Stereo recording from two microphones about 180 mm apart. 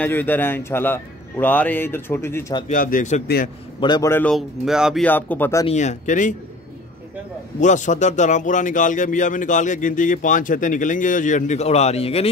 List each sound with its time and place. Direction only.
0.0 s a man's voice: 10° left (ahead or behind)
2.7 s speech: 50° left (ahead or behind)
3.8 s a man's voice: 25° left (ahead or behind)
4.1 s a man's voice: 10° left (ahead or behind)
4.4 s speech: 5° right (ahead or behind)
5.0 s a man's voice: 10° left (ahead or behind)
5.7 s speech: 40° left (ahead or behind)
7.6 s speech: 45° left (ahead or behind)